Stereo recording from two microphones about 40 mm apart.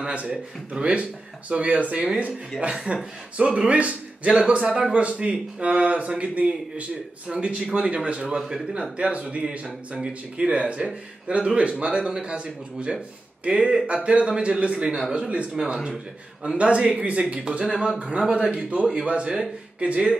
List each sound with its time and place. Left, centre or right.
0.0 s a man's voice: right
15.5 s a man's voice: centre
16.5 s speech: right
17.5 s a man's voice: right